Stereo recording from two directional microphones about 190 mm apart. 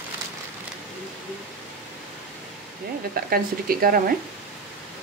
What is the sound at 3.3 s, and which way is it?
Speech, 50° right (ahead or behind).